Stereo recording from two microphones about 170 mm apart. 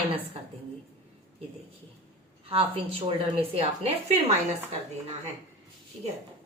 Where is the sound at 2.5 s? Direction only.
35° right (ahead or behind).